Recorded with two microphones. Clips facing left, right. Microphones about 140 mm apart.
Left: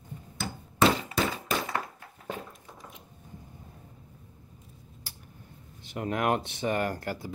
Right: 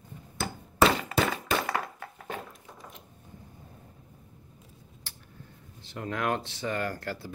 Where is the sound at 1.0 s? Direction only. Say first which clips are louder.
Right 2 dB; 75° right (ahead or behind).